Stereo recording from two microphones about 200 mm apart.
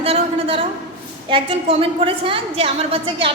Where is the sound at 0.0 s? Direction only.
30° right (ahead or behind).